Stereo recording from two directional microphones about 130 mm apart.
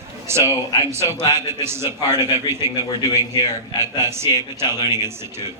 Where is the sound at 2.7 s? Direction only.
30° left (ahead or behind).